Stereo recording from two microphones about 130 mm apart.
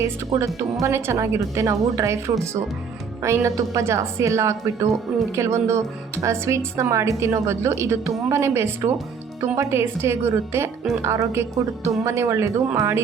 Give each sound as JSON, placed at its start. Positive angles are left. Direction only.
{"t": 0.3, "sound": "speech", "side_deg": -25}